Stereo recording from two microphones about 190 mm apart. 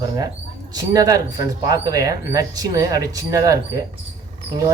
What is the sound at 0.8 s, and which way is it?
Speech, 20° right (ahead or behind).